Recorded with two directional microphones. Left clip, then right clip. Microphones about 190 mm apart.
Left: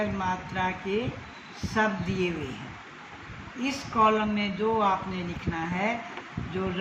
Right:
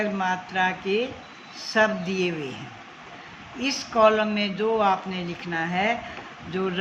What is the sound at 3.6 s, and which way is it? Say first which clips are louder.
Speech: right 4 dB; 60° right (ahead or behind).